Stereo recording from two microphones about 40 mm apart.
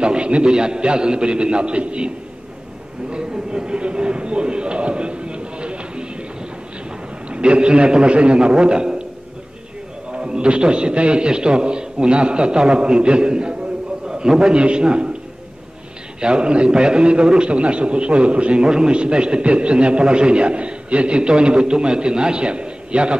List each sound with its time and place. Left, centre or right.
0.0 s a man's voice: right
7.2 s a man's voice: right
10.1 s a man's voice: right
16.2 s a man's voice: right